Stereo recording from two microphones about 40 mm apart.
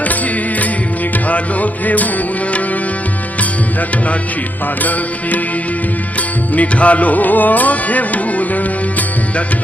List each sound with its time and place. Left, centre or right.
1.1 s music: left
3.8 s music: left
6.5 s music: left